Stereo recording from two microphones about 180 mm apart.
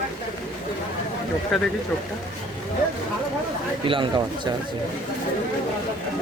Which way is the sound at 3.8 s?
30° right (ahead or behind).